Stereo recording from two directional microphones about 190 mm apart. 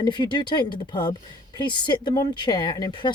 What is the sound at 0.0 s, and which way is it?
Speech, 25° left (ahead or behind).